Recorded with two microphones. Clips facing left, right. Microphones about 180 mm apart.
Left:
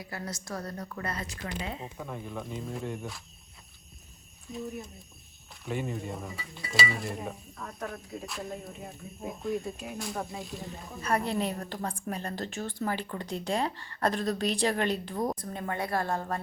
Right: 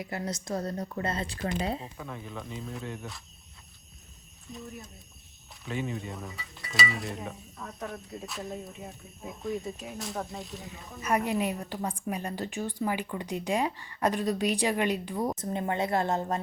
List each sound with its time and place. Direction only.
0.0 s a woman's voice: 20° right (ahead or behind)
1.4 s speech: 40° right (ahead or behind)
2.0 s speech: 5° left (ahead or behind)
5.6 s speech: centre (ahead or behind)
11.3 s speech: 10° right (ahead or behind)
15.4 s a woman's voice: 25° right (ahead or behind)